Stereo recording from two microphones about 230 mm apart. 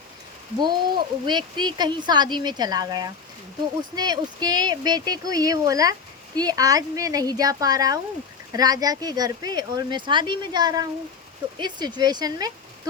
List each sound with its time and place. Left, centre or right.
0.6 s speech: centre